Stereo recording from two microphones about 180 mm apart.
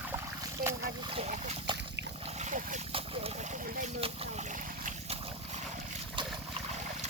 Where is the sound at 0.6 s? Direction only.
50° right (ahead or behind).